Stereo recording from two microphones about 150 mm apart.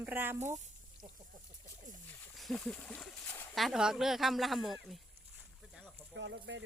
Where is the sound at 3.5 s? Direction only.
Centre (ahead or behind).